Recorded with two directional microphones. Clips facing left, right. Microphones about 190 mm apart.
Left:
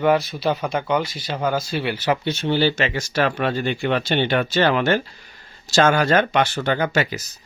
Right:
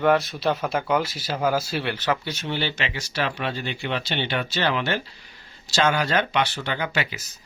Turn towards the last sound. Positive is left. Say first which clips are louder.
# left 6 dB
turn(degrees=45)  # may be behind; listen again after turning